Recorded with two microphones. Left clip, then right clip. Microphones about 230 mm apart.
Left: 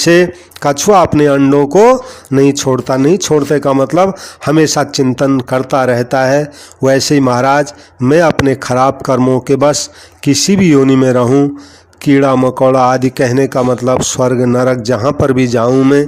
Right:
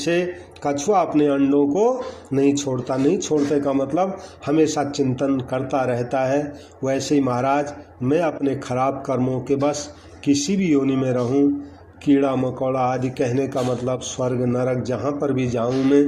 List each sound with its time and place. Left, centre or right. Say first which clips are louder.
0.0 s a man's voice: left 13 dB; left